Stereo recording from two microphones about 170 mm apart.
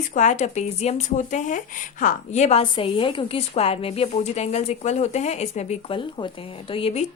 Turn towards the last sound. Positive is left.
turn(degrees=35)  # may be behind; listen again after turning